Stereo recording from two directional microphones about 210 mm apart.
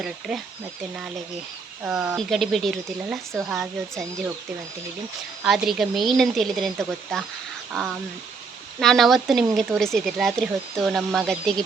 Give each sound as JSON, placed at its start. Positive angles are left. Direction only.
{"t": 0.0, "sound": "speech", "side_deg": -5}
{"t": 5.4, "sound": "speech", "side_deg": 0}